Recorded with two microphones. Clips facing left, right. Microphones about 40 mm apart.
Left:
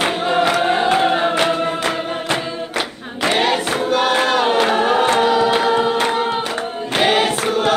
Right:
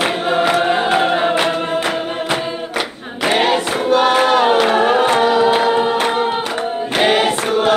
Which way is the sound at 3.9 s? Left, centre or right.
Right.